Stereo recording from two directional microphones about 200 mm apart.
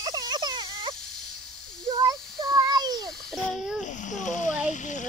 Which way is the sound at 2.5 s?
20° right (ahead or behind).